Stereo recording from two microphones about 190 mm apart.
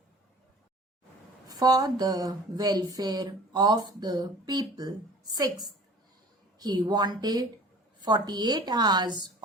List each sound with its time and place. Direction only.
1.5 s a woman's voice: 20° right (ahead or behind)